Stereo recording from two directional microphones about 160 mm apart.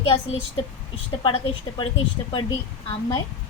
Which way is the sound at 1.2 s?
30° left (ahead or behind).